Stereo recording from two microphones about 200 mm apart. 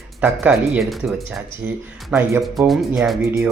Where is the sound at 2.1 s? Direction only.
5° right (ahead or behind).